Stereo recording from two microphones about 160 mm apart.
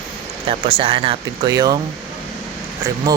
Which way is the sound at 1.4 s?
25° right (ahead or behind).